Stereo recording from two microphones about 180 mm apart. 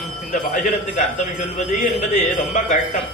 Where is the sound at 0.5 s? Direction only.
45° left (ahead or behind).